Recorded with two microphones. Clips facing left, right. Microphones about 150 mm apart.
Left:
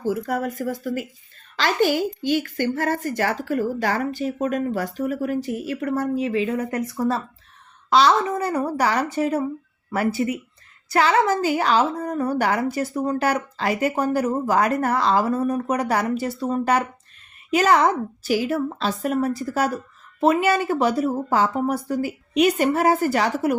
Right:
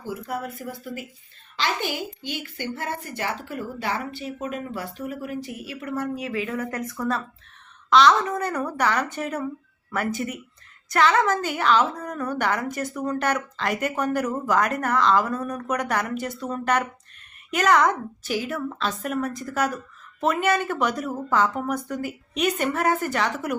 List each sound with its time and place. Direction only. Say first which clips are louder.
0.0 s a woman's voice: left 7 dB; 50° left (ahead or behind)
1.5 s a woman's voice: left 7 dB; 45° left (ahead or behind)
6.1 s speech: left 6 dB; 25° left (ahead or behind)
10.8 s a woman's voice: left 2 dB; 35° left (ahead or behind)